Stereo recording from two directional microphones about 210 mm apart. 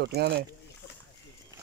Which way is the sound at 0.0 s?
50° right (ahead or behind).